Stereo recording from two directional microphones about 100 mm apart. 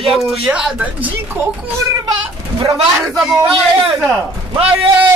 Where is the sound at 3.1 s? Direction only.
Centre (ahead or behind).